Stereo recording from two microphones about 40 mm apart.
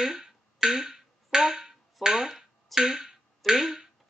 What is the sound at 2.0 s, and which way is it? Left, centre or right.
Finger snapping, centre.